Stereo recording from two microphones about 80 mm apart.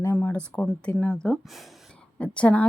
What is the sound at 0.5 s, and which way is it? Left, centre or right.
A woman's voice, centre.